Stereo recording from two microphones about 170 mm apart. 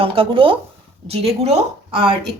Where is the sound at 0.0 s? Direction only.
35° right (ahead or behind).